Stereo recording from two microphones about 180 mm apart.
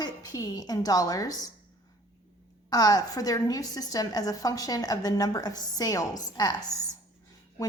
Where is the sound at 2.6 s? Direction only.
20° left (ahead or behind).